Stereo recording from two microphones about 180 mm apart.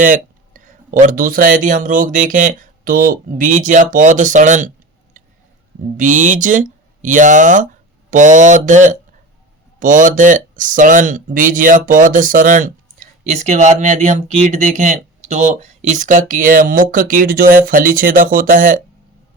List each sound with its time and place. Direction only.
0.0 s speech: 45° right (ahead or behind)
6.0 s speech: 45° right (ahead or behind)